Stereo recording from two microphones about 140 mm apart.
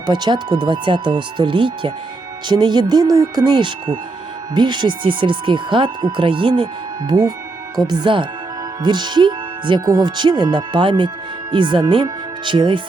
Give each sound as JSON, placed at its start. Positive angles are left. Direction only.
{"t": 0.0, "sound": "speech", "side_deg": -30}